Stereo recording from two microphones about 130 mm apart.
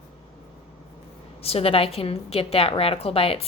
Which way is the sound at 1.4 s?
50° left (ahead or behind).